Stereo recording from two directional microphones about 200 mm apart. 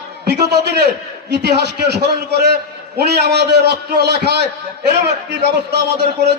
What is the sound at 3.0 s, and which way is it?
A man's voice, 55° right (ahead or behind).